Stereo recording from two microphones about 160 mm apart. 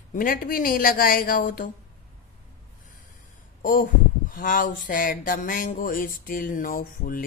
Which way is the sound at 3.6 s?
60° left (ahead or behind).